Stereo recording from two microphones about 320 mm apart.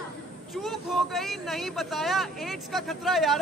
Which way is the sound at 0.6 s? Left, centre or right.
Centre.